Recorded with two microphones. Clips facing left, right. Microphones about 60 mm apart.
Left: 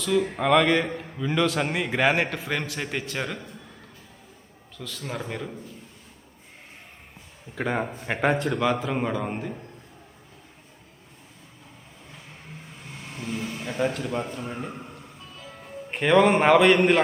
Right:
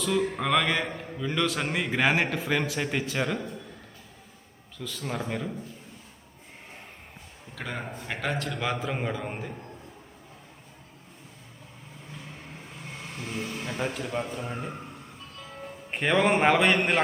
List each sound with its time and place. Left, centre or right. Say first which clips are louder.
0.0 s a man's voice: left 3 dB; centre
4.8 s a man's voice: even; centre
7.5 s speech: left 8 dB; centre
8.4 s a man's voice: left 6 dB; centre
13.5 s a man's voice: left 6 dB; centre